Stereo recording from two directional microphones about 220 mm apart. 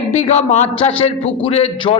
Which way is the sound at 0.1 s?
30° left (ahead or behind).